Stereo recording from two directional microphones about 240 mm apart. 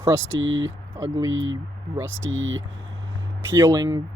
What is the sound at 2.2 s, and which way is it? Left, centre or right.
Speech, right.